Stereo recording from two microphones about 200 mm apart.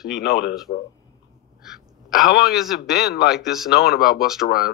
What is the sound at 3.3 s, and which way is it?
Speech, centre (ahead or behind).